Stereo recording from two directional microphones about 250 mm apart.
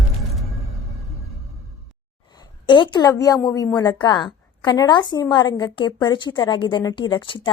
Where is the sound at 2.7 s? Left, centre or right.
Centre.